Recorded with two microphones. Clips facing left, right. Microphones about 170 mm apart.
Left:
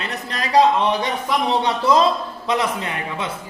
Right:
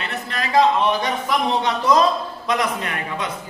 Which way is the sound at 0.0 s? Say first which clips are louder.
Even; 35° left (ahead or behind).